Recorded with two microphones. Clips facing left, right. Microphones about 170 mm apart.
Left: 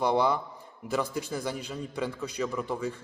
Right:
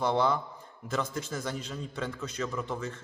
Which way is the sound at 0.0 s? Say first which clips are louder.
Left 2 dB; 10° left (ahead or behind).